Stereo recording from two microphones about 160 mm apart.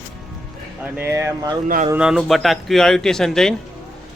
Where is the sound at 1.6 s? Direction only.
60° right (ahead or behind).